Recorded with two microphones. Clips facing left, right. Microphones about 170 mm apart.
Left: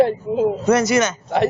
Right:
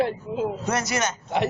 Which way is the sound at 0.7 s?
90° left.